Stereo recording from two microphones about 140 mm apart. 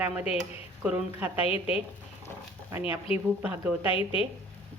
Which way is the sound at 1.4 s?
40° left (ahead or behind).